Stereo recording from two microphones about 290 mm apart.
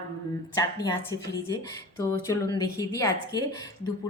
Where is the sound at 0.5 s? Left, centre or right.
Centre.